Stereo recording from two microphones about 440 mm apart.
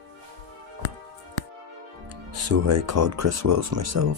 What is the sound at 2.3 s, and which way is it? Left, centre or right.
Speech, right.